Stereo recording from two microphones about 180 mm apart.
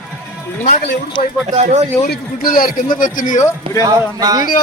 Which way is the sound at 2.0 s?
55° left (ahead or behind).